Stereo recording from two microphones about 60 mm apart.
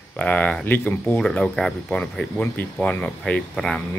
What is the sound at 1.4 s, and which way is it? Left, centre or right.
Speech, centre.